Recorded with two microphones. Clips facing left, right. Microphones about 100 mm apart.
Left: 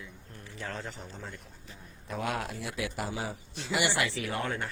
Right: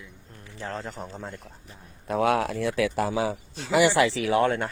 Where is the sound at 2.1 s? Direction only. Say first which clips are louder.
Right 10 dB; 70° right (ahead or behind).